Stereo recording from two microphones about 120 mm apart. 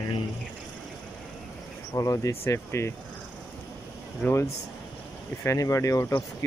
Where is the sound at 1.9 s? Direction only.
25° left (ahead or behind).